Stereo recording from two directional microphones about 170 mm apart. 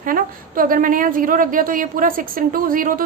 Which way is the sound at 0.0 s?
55° right (ahead or behind).